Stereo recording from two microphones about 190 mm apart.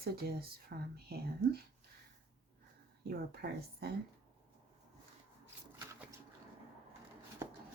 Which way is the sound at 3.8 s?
55° right (ahead or behind).